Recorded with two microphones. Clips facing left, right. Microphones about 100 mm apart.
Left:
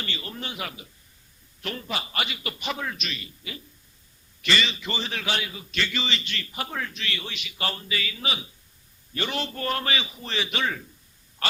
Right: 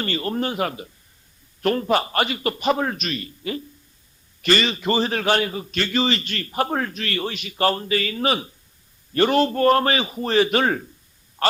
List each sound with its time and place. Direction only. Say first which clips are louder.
0.0 s a man's voice: right 11 dB; 45° right (ahead or behind)
11.4 s quack: right 9 dB; 45° right (ahead or behind)